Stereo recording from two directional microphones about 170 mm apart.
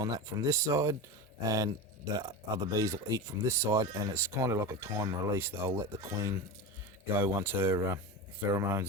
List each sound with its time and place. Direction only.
0.0 s speech: 20° right (ahead or behind)